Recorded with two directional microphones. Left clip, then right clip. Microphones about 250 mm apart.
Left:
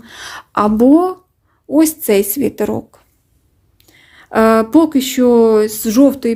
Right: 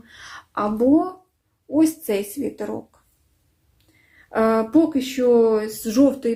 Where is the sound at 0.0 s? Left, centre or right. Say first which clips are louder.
Left 10 dB; left.